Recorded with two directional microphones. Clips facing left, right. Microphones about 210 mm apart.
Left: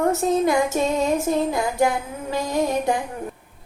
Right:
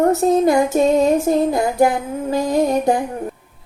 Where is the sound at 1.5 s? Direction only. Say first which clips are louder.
Right 5 dB; 40° right (ahead or behind).